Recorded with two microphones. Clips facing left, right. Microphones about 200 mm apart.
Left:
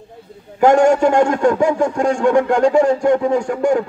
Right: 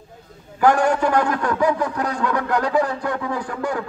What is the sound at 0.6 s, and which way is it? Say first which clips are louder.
A man's voice: left 6 dB; 25° left (ahead or behind).